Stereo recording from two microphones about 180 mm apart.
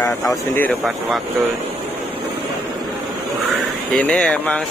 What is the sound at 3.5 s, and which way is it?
Speech, 5° left (ahead or behind).